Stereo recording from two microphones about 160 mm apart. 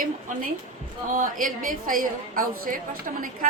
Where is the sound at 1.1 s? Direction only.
55° right (ahead or behind).